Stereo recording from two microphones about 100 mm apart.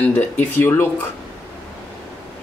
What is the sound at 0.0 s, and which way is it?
Speech, 20° left (ahead or behind).